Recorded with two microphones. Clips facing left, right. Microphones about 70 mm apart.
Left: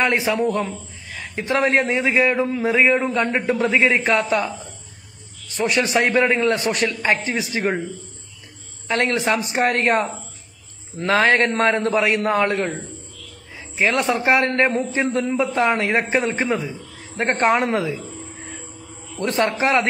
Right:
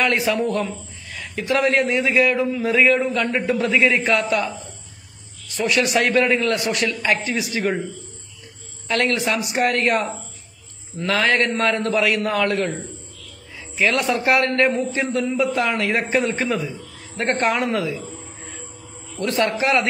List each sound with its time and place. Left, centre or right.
0.0 s a man's voice: left
1.3 s a man's voice: left
5.6 s a man's voice: left
8.8 s a man's voice: left
13.7 s a man's voice: left
19.1 s speech: left